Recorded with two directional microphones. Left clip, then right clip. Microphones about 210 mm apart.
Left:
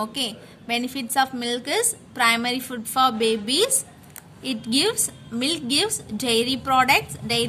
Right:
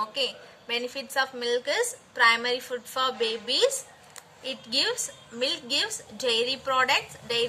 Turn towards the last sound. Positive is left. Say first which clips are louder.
# left 4 dB
turn(degrees=50)  # may be behind; listen again after turning